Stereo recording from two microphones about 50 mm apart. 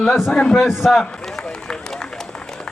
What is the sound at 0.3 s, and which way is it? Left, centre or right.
Speech, centre.